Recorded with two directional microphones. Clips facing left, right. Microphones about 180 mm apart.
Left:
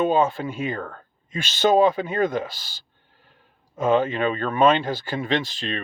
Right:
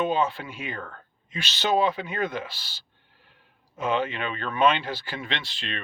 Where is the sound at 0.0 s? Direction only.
45° left (ahead or behind).